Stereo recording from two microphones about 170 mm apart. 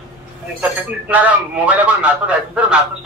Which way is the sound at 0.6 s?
10° right (ahead or behind).